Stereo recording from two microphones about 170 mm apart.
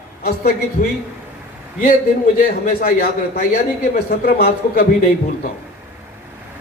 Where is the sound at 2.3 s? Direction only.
60° left (ahead or behind).